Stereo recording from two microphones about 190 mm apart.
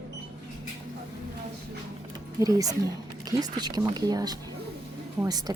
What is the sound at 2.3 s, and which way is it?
Speech, 20° right (ahead or behind).